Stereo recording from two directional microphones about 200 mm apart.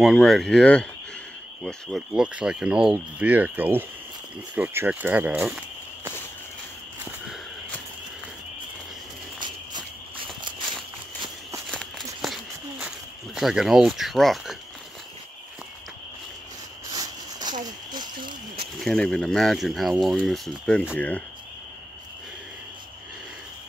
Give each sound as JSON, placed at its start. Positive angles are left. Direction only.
{"t": 0.0, "sound": "speech", "side_deg": 0}
{"t": 9.4, "sound": "cricket", "side_deg": -25}
{"t": 11.7, "sound": "a sound", "side_deg": 0}
{"t": 16.9, "sound": "a sound", "side_deg": -20}
{"t": 17.6, "sound": "cricket", "side_deg": -20}
{"t": 18.8, "sound": "speech", "side_deg": 5}